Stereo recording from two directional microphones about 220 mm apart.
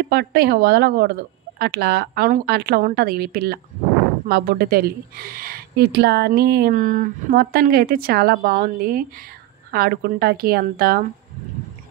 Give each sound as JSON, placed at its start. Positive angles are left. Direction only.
{"t": 0.0, "sound": "a woman's voice", "side_deg": -45}